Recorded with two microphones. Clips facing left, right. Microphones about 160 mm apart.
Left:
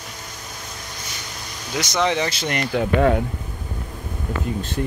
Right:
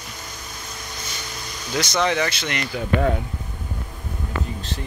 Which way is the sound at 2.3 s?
45° left (ahead or behind).